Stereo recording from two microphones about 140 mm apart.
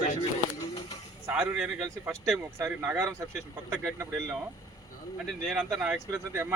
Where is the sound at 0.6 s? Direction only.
30° left (ahead or behind).